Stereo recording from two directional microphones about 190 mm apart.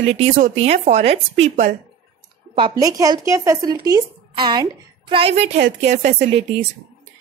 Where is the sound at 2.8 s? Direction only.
20° right (ahead or behind); by 6.1 s 40° right (ahead or behind).